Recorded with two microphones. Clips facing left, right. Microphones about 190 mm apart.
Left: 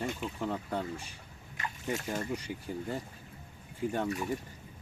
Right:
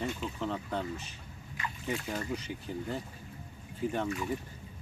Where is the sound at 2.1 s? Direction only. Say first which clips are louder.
Left 1 dB; 10° left (ahead or behind).